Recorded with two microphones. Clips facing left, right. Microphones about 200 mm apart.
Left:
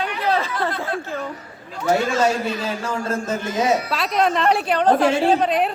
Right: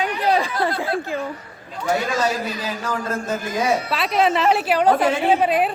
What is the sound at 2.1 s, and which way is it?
A man's voice, 30° left (ahead or behind).